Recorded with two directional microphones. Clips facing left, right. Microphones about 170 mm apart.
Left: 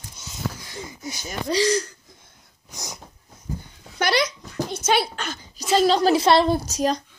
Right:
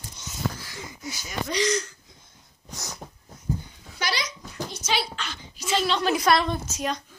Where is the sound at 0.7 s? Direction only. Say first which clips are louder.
Left 3 dB; 20° left (ahead or behind).